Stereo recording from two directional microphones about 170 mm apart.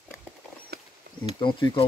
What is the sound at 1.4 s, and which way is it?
Speech, 30° left (ahead or behind).